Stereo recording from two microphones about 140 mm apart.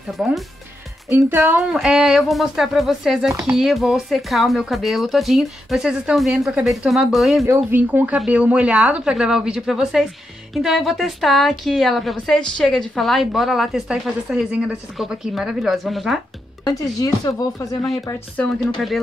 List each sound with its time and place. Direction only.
1.1 s speech: 20° right (ahead or behind)
1.7 s a woman's voice: centre (ahead or behind)
7.4 s a woman's voice: 15° right (ahead or behind); by 16.2 s centre (ahead or behind)
16.6 s speech: 30° left (ahead or behind)
18.3 s speech: 10° left (ahead or behind)